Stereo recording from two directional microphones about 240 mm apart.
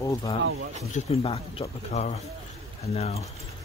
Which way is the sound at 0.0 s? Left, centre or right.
Centre.